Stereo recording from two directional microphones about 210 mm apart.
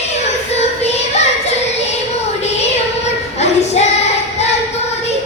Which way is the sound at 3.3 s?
30° left (ahead or behind).